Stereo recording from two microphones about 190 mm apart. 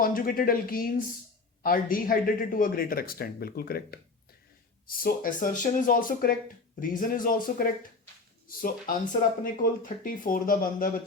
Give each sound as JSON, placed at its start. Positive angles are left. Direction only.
{"t": 0.0, "sound": "speech", "side_deg": 50}